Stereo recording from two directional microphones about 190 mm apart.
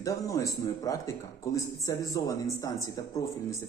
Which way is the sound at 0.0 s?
15° left (ahead or behind).